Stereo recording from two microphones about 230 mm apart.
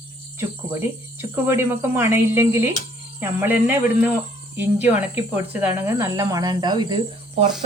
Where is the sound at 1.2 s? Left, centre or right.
Centre.